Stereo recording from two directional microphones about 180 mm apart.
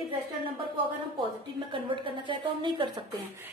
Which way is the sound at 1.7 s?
25° right (ahead or behind).